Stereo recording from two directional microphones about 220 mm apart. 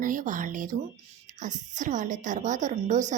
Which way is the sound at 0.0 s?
35° right (ahead or behind).